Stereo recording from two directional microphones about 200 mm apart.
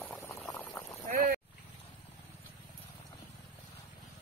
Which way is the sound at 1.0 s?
45° right (ahead or behind).